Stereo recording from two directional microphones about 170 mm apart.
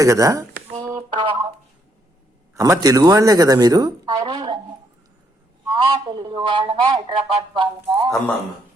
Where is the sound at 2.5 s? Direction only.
20° right (ahead or behind).